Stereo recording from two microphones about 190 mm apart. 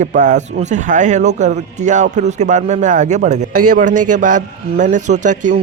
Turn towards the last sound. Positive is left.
turn(degrees=-40)  # may be behind; listen again after turning